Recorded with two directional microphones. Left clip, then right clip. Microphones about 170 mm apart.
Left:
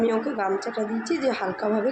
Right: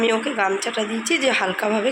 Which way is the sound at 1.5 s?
15° right (ahead or behind).